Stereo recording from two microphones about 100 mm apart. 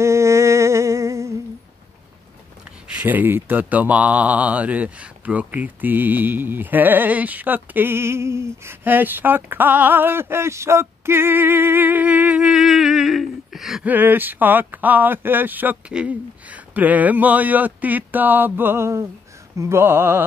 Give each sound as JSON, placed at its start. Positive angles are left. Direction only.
{"t": 0.0, "sound": "humming", "side_deg": -30}
{"t": 3.0, "sound": "speech", "side_deg": -20}
{"t": 13.8, "sound": "speech", "side_deg": -20}